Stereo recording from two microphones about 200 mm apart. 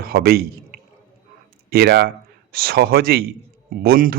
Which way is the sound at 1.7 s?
50° right (ahead or behind).